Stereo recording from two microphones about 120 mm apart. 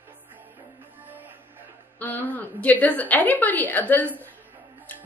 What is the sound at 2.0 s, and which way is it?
A woman's voice, 15° left (ahead or behind).